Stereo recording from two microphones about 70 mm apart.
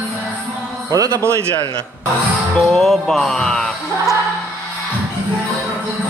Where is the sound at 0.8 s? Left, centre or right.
Right.